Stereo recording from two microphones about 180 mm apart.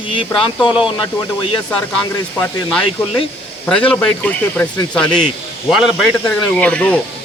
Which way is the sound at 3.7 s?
5° left (ahead or behind).